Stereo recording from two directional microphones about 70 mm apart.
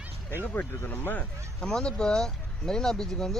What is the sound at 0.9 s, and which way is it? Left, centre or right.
Speech, left.